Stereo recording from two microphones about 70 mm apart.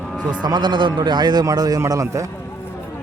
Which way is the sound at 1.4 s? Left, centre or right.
Right.